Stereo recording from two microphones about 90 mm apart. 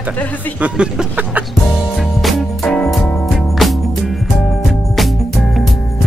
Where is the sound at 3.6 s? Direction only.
Centre (ahead or behind).